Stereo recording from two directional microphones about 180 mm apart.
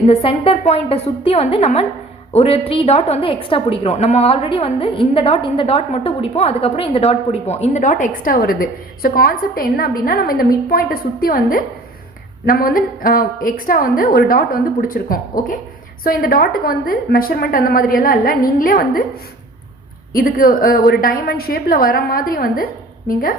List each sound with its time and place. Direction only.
0.1 s a woman's voice: 30° left (ahead or behind); by 19.0 s 55° left (ahead or behind)
20.1 s a woman's voice: 55° left (ahead or behind)